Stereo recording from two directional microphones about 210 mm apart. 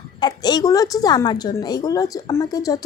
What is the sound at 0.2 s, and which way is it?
A woman's voice, 20° left (ahead or behind).